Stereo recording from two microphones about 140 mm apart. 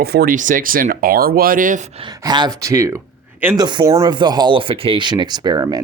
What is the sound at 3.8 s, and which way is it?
Speech, 20° right (ahead or behind).